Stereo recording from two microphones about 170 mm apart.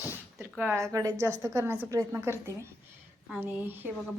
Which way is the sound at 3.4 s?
10° right (ahead or behind).